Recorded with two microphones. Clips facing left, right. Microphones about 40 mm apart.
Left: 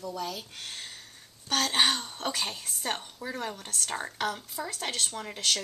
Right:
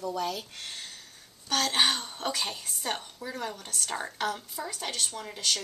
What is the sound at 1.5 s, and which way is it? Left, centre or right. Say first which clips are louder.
A woman's voice: even; centre.